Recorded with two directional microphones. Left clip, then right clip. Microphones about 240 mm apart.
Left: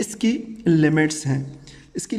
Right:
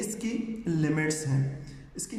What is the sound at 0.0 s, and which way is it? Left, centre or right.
A man's voice, left.